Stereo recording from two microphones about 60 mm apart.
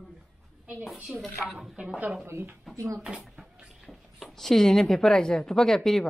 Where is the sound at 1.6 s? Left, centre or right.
Centre.